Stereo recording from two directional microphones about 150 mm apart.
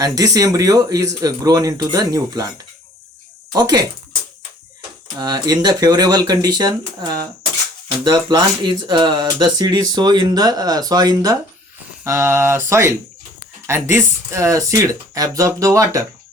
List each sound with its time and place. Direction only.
0.0 s speech: 25° right (ahead or behind)
3.5 s speech: 25° right (ahead or behind)
5.1 s speech: 25° right (ahead or behind)